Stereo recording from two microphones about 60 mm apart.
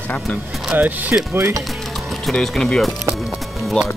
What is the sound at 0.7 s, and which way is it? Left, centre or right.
Speech, right.